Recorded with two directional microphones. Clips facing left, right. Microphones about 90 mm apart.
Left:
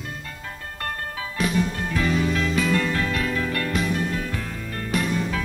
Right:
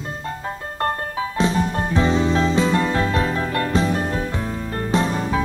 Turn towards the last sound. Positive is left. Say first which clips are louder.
# right 4 dB
turn(degrees=-30)  # may be behind; listen again after turning